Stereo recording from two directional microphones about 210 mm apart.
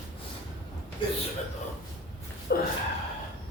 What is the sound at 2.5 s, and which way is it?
Gasp, 50° left (ahead or behind).